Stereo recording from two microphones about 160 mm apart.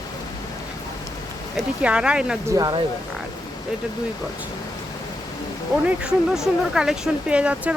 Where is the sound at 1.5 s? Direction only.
5° right (ahead or behind).